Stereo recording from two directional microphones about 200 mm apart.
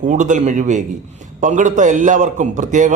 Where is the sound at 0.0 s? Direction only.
40° right (ahead or behind).